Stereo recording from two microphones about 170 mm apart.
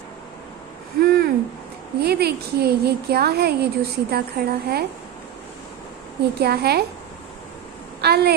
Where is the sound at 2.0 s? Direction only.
70° right (ahead or behind).